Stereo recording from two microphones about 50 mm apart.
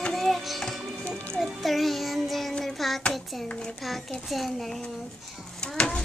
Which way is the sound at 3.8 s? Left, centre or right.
Centre.